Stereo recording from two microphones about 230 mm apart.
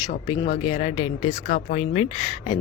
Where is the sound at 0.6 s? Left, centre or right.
Left.